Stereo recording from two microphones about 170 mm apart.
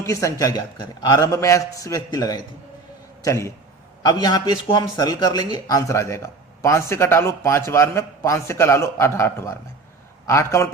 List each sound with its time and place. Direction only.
0.0 s a man's voice: 20° left (ahead or behind)